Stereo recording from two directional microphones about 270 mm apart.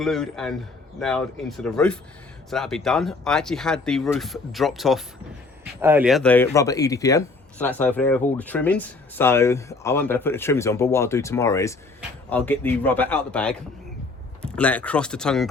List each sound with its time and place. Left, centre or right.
0.0 s a man's voice: centre